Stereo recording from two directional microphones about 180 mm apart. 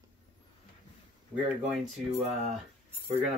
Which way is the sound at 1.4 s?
10° right (ahead or behind).